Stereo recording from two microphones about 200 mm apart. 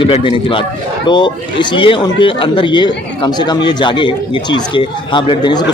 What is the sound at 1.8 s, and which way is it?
A man's voice, 25° left (ahead or behind).